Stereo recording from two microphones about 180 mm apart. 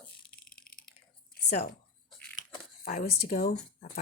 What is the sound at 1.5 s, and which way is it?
Speech, 60° left (ahead or behind).